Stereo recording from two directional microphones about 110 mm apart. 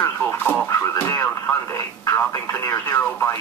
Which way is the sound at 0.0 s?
20° left (ahead or behind).